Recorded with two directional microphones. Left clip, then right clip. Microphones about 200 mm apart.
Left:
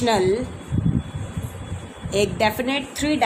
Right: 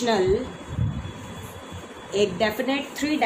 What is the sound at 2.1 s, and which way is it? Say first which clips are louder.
A woman's voice: left 2 dB; 60° left (ahead or behind).